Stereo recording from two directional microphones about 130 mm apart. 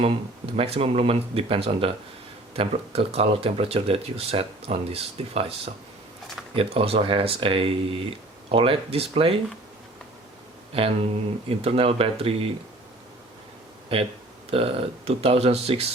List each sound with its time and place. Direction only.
0.0 s speech: 50° right (ahead or behind)
11.4 s speech: 50° right (ahead or behind)
13.9 s speech: 50° right (ahead or behind)